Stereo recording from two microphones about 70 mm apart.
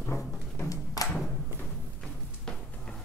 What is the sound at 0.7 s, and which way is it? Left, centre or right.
Music, left.